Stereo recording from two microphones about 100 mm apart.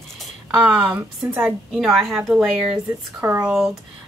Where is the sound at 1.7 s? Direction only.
Centre (ahead or behind).